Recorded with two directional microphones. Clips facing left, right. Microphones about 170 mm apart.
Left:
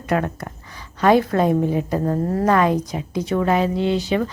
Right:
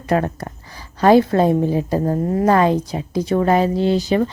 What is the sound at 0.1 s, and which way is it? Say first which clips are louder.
Speech: right 3 dB; 35° right (ahead or behind).